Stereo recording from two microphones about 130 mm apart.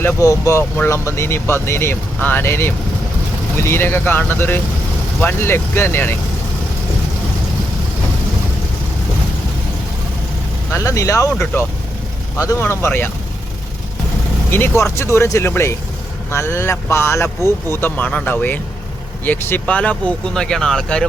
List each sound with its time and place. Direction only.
0.0 s speech: 25° left (ahead or behind)
10.7 s speech: 25° left (ahead or behind)
12.4 s speech: 20° left (ahead or behind)
14.5 s speech: 20° left (ahead or behind)